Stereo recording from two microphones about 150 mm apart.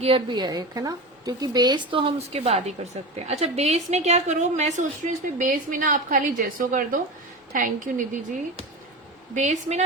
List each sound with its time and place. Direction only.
0.0 s a woman's voice: 35° right (ahead or behind); by 8.2 s 60° right (ahead or behind)
9.3 s a woman's voice: 50° right (ahead or behind)